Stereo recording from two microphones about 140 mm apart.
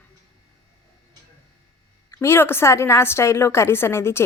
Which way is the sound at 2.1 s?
15° left (ahead or behind).